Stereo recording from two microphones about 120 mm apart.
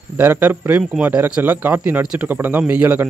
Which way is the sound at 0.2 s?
15° right (ahead or behind).